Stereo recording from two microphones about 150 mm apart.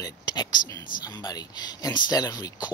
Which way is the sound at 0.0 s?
30° left (ahead or behind).